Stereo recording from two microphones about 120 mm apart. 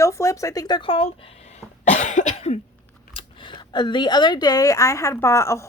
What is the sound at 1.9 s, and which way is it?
Cough, 90° left.